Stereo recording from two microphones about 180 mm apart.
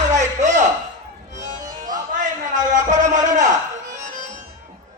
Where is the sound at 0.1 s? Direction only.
40° right (ahead or behind).